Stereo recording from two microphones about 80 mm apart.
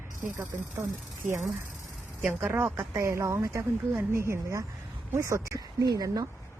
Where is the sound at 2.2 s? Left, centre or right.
Right.